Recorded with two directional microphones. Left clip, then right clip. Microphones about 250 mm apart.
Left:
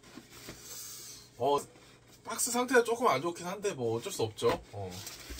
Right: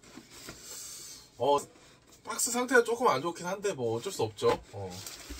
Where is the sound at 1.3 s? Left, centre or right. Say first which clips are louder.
Right 2 dB; centre.